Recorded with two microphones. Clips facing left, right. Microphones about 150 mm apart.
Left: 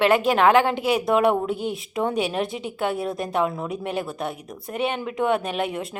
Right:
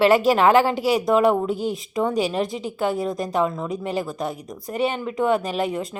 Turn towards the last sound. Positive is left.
turn(degrees=5)  # may be behind; listen again after turning